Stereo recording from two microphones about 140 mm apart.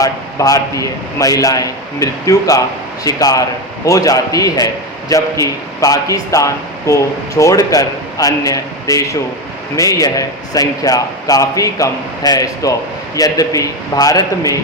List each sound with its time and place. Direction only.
0.0 s a man's voice: 25° left (ahead or behind)